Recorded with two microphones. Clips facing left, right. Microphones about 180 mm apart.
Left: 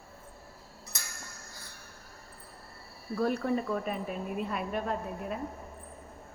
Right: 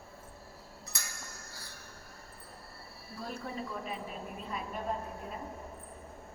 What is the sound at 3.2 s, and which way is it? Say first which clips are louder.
A woman's voice: left 11 dB; 65° left (ahead or behind).